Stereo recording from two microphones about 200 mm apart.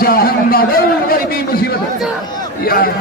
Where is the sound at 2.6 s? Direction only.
45° left (ahead or behind).